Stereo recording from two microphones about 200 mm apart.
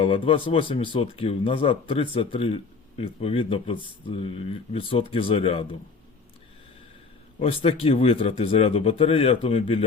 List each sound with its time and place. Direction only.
0.0 s speech: 25° left (ahead or behind)
7.3 s speech: 30° left (ahead or behind)